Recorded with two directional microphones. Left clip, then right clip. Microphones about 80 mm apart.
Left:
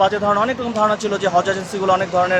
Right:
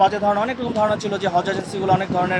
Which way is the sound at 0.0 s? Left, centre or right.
Left.